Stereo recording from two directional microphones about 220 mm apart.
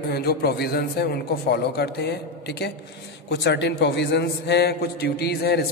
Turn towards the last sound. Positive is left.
turn(degrees=45)  # may be behind; listen again after turning